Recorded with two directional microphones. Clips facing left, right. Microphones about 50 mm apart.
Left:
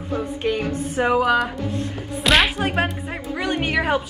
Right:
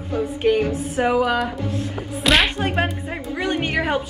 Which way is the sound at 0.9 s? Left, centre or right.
Centre.